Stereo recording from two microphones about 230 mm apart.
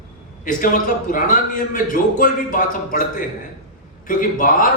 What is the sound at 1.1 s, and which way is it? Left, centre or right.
A man's voice, left.